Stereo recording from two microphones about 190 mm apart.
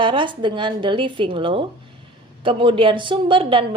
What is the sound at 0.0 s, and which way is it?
A woman's voice, 25° right (ahead or behind).